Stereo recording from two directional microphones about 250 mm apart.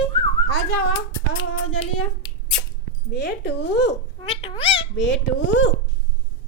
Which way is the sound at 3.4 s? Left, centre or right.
Left.